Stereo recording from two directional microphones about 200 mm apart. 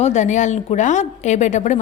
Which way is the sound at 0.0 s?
35° left (ahead or behind).